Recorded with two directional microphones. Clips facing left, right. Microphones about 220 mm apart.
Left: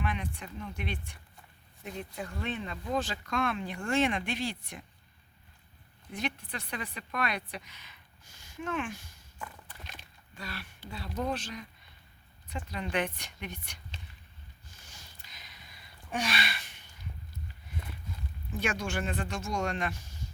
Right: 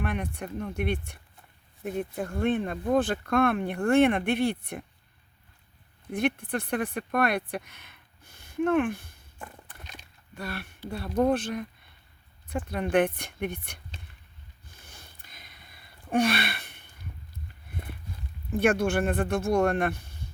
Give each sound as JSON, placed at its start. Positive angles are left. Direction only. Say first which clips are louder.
{"t": 0.0, "sound": "speech", "louder": "right 5 dB", "side_deg": -60}
{"t": 6.1, "sound": "speech", "louder": "right 9 dB", "side_deg": -55}
{"t": 14.8, "sound": "sniff", "louder": "right 5 dB", "side_deg": -55}
{"t": 17.7, "sound": "a sound", "louder": "right 3 dB", "side_deg": -55}
{"t": 18.5, "sound": "speech", "louder": "right 10 dB", "side_deg": -55}